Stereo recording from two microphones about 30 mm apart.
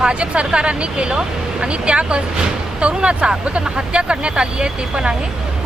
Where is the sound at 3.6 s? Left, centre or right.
Right.